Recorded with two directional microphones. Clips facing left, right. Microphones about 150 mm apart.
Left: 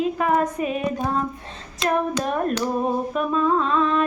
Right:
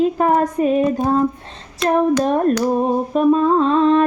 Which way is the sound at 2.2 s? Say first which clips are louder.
Right 7 dB; 30° right (ahead or behind).